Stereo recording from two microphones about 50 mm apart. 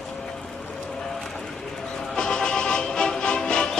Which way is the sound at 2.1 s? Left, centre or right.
Centre.